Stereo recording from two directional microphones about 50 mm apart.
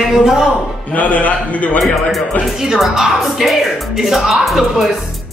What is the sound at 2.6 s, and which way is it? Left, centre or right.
Speech, centre.